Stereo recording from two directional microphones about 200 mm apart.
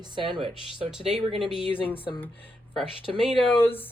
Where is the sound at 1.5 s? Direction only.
25° left (ahead or behind).